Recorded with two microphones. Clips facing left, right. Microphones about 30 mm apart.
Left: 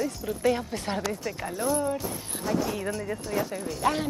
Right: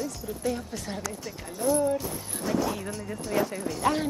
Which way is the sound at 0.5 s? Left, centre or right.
Left.